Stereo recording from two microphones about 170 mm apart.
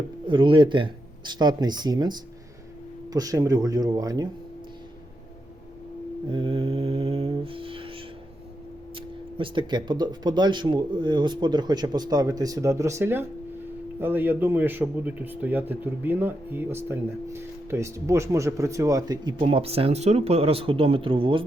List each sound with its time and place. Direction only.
0.3 s speech: 30° right (ahead or behind)
6.3 s mantra: 30° right (ahead or behind)
9.0 s a man's voice: 30° right (ahead or behind)